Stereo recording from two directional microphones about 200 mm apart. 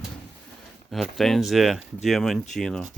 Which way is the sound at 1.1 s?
Centre (ahead or behind).